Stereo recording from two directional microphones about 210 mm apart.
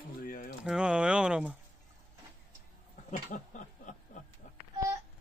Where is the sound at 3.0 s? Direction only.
35° left (ahead or behind).